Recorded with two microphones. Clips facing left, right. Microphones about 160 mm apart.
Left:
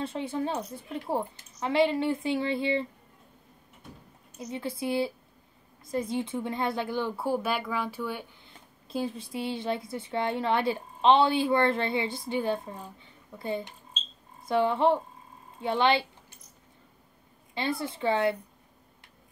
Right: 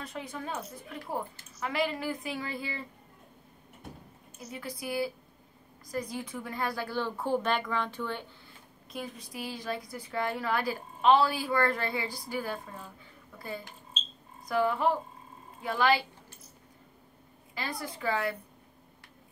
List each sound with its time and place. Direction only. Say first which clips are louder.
0.0 s a woman's voice: left 8 dB; 30° left (ahead or behind)
4.5 s a woman's voice: left 6 dB; 25° left (ahead or behind); by 8.3 s 10° left (ahead or behind)
8.8 s a woman's voice: left 8 dB; 30° left (ahead or behind)
17.6 s a woman's voice: left 6 dB; 25° left (ahead or behind)